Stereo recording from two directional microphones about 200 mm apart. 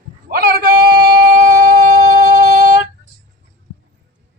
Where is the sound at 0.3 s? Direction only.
50° right (ahead or behind).